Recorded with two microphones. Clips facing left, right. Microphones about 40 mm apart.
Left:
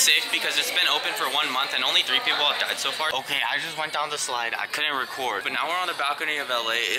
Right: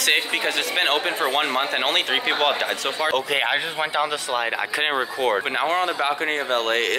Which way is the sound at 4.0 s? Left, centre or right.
Centre.